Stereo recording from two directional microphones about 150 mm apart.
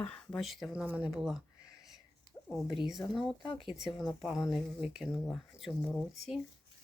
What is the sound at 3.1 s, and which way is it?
Speech, centre (ahead or behind).